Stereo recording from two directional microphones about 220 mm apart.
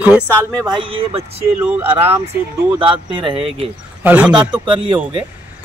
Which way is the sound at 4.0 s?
5° right (ahead or behind).